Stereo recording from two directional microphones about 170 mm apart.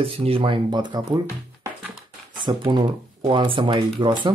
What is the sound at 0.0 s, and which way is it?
Speech, 35° right (ahead or behind).